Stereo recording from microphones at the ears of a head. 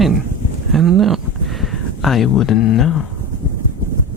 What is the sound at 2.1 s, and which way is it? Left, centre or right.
Speech, left.